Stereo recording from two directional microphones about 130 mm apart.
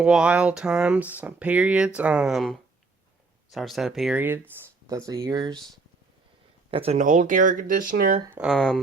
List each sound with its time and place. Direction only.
0.0 s speech: 10° right (ahead or behind)
4.9 s speech: 25° right (ahead or behind)
6.7 s speech: 45° right (ahead or behind)
7.0 s speech: 80° right
8.4 s speech: centre (ahead or behind)